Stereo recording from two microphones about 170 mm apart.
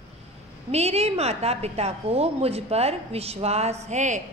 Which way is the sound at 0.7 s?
40° right (ahead or behind).